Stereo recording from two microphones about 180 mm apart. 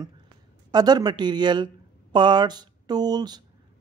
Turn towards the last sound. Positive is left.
turn(degrees=-20)  # may be behind; listen again after turning